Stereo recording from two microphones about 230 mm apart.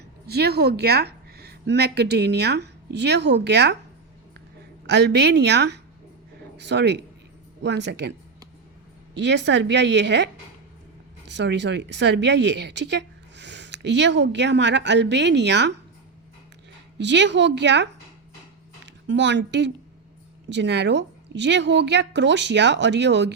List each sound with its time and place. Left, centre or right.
0.3 s a woman's voice: right
4.9 s speech: right
9.1 s speech: right
11.3 s speech: right
17.0 s speech: right
19.0 s speech: right